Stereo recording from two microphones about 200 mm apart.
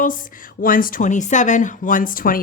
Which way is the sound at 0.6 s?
45° left (ahead or behind).